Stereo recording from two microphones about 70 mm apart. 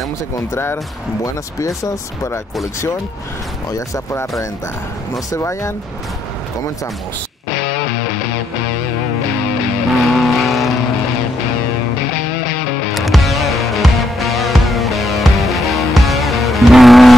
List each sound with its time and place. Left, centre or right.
1.2 s speech: left
3.7 s speech: left
5.3 s speech: left
10.1 s vehicle: centre
12.9 s music: centre